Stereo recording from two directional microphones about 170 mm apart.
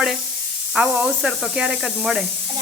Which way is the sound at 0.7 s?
5° right (ahead or behind).